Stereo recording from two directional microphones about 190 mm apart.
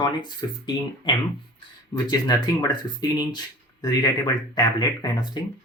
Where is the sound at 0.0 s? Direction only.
20° left (ahead or behind).